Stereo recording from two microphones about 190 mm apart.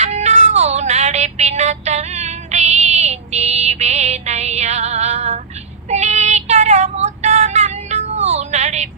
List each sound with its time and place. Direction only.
0.0 s meow: 35° right (ahead or behind)
5.9 s female singing: 35° right (ahead or behind)